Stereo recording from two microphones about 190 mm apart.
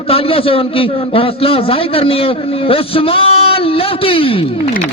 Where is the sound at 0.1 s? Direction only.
30° left (ahead or behind).